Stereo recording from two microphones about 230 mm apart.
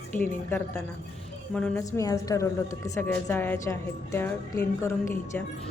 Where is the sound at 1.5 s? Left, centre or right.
Centre.